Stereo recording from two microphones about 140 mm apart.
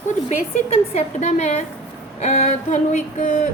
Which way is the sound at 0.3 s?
55° left (ahead or behind).